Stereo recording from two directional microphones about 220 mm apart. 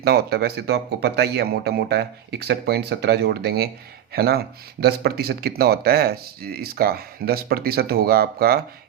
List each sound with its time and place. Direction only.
0.0 s speech: 45° right (ahead or behind)